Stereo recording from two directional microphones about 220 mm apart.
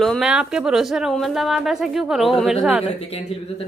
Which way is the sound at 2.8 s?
25° left (ahead or behind).